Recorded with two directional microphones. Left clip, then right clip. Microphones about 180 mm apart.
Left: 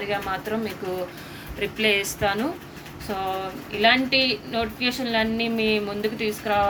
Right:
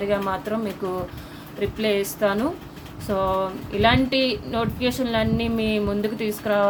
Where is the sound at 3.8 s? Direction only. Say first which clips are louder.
Even; 65° right (ahead or behind).